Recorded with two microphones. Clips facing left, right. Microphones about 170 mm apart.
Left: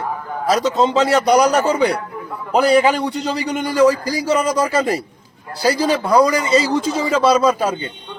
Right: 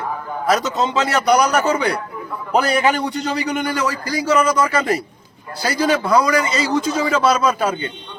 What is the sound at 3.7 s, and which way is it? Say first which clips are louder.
Speech: left 7 dB; 35° left (ahead or behind).